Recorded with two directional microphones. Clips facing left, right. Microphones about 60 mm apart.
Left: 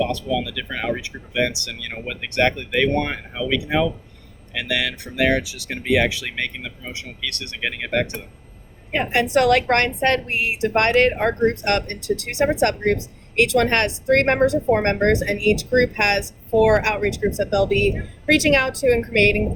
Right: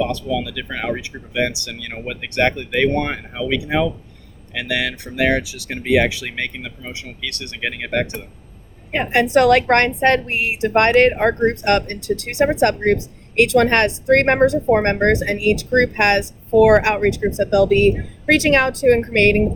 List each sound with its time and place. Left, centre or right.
0.0 s a woman's voice: right